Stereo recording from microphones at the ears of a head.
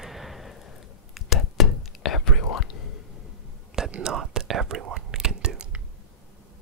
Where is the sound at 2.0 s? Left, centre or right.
Left.